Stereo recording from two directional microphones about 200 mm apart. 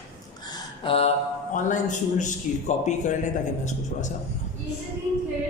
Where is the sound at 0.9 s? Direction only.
30° left (ahead or behind).